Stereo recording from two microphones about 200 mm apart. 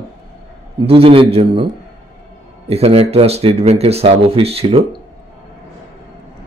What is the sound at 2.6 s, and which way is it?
Speech, 30° right (ahead or behind).